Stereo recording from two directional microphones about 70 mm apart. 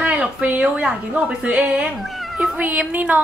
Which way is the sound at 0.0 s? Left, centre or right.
Centre.